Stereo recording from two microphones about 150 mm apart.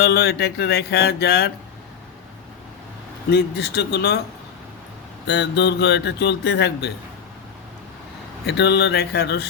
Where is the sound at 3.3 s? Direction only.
90° left.